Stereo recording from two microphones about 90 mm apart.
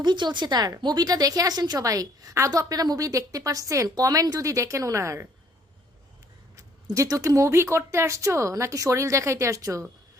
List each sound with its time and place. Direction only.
0.0 s a woman's voice: 55° right (ahead or behind); by 5.2 s 35° right (ahead or behind)
6.6 s a woman's voice: 35° right (ahead or behind)